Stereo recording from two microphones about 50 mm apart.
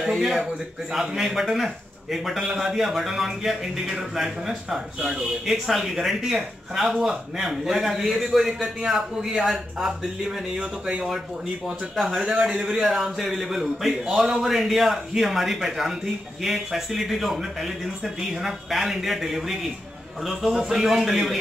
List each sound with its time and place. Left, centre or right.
0.0 s a man's voice: centre
10.6 s speech: right
11.6 s a man's voice: centre